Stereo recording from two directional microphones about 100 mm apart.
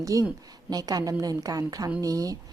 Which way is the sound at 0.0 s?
35° right (ahead or behind).